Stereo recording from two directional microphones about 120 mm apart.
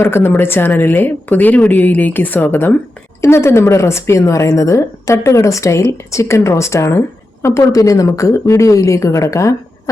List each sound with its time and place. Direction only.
0.0 s speech: 20° left (ahead or behind)